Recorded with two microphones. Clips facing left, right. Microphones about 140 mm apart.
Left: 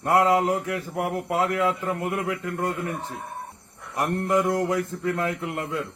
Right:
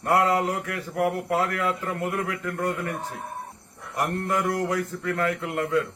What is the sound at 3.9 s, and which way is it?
Speech, 20° left (ahead or behind).